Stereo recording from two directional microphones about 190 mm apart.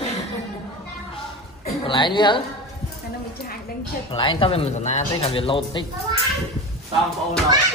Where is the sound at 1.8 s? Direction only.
25° left (ahead or behind).